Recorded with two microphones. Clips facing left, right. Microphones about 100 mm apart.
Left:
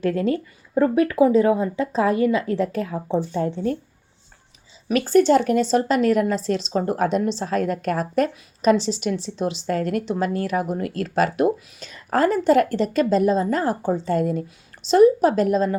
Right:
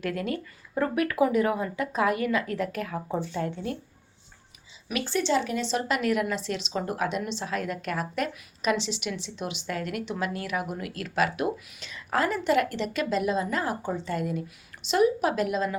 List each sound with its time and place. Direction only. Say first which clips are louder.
0.0 s a woman's voice: left 8 dB; 30° left (ahead or behind)
4.9 s a woman's voice: left 10 dB; 45° left (ahead or behind)